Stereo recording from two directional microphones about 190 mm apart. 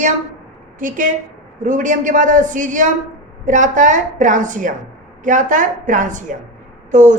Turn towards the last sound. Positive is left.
turn(degrees=-40)  # may be behind; listen again after turning